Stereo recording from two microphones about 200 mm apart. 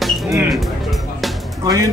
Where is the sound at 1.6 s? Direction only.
20° right (ahead or behind).